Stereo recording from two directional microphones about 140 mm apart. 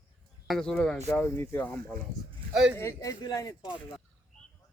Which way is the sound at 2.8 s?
20° left (ahead or behind).